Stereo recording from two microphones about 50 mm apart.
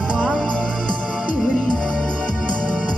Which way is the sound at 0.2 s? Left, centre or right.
Centre.